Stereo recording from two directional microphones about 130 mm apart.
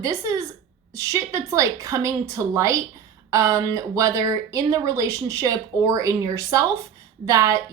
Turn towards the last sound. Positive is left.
turn(degrees=-25)  # may be behind; listen again after turning